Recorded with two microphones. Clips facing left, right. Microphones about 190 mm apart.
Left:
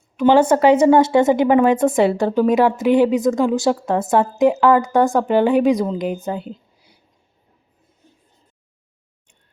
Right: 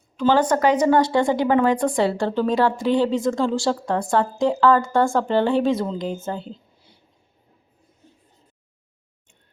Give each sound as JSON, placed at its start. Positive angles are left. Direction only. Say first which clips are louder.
{"t": 0.2, "sound": "a woman's voice", "louder": "left 5 dB", "side_deg": 20}